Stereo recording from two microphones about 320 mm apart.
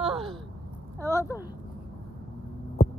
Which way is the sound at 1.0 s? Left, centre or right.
Centre.